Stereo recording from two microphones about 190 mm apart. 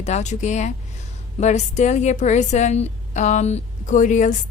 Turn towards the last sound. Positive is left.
turn(degrees=40)  # may be behind; listen again after turning